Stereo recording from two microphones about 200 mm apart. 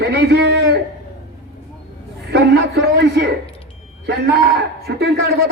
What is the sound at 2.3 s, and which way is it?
A man's voice, 55° right (ahead or behind).